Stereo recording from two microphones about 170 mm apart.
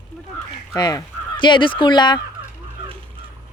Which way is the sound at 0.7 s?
25° left (ahead or behind).